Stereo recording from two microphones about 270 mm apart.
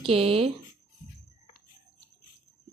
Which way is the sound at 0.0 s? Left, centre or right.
Right.